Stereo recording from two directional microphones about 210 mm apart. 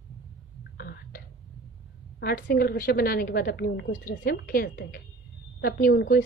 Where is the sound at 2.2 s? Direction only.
45° left (ahead or behind).